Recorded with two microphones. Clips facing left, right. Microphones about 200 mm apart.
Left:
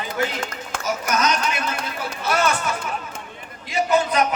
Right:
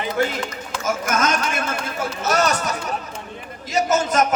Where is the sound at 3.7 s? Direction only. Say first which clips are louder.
Even; 45° right (ahead or behind).